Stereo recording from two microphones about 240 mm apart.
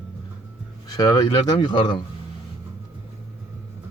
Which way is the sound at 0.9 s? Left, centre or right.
Centre.